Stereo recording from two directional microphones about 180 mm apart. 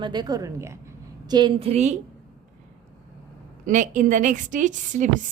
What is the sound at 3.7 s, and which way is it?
A woman's voice, 45° right (ahead or behind).